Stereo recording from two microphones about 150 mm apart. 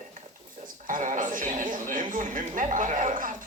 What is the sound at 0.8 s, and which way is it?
Sheep, 60° right (ahead or behind).